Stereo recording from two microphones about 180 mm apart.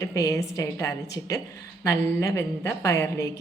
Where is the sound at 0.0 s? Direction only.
20° left (ahead or behind).